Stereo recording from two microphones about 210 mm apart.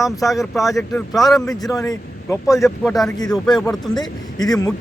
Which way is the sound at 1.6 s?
15° left (ahead or behind).